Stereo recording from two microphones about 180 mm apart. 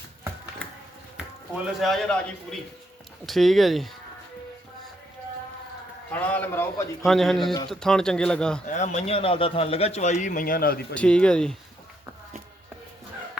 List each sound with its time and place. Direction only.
1.6 s a man's voice: centre (ahead or behind)
6.1 s a man's voice: 10° left (ahead or behind)
7.0 s a man's voice: centre (ahead or behind)
8.6 s a man's voice: 45° left (ahead or behind)
10.9 s a man's voice: 5° left (ahead or behind)